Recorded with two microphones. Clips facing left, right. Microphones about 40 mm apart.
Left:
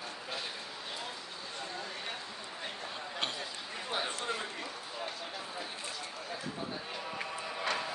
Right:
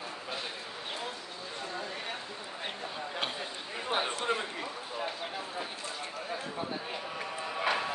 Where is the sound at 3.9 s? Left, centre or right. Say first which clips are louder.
Right 5 dB; right.